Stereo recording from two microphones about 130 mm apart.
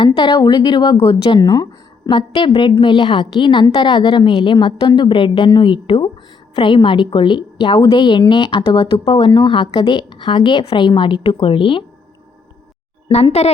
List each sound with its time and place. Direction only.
0.0 s a woman's voice: 35° left (ahead or behind)
0.9 s a woman's voice: 45° left (ahead or behind)
13.4 s a woman's voice: 55° left (ahead or behind)